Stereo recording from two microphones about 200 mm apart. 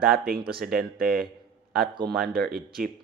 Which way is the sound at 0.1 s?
50° right (ahead or behind).